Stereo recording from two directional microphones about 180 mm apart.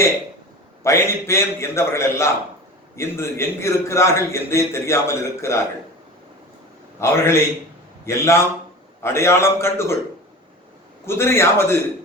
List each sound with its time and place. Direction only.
0.9 s a man's voice: 15° left (ahead or behind)
7.0 s a man's voice: 15° left (ahead or behind)
11.0 s a man's voice: 15° left (ahead or behind)